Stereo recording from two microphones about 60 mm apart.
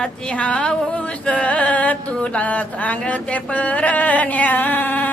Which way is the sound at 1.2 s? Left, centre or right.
Left.